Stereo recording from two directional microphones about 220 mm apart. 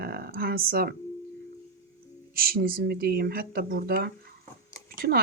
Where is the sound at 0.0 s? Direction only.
45° right (ahead or behind).